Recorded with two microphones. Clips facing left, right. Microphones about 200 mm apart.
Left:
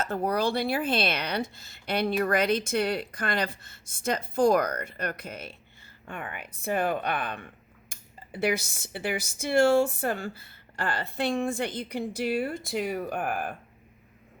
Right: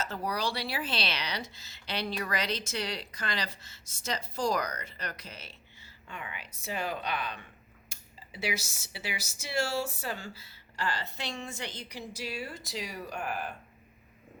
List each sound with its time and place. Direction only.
0.0 s speech: 55° left (ahead or behind)